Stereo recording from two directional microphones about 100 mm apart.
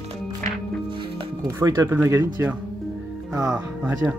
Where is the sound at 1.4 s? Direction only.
30° right (ahead or behind).